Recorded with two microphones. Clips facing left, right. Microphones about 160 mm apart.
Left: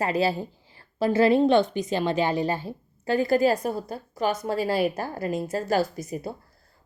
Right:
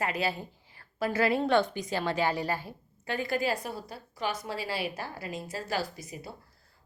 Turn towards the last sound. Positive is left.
turn(degrees=45)  # may be behind; listen again after turning